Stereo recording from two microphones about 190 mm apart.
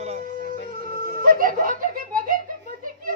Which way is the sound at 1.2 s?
45° right (ahead or behind).